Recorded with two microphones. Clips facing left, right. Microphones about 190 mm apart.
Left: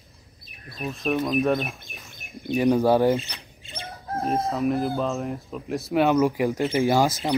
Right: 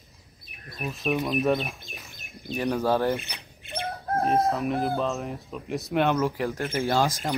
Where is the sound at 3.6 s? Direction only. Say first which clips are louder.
Right 5 dB; 60° right (ahead or behind).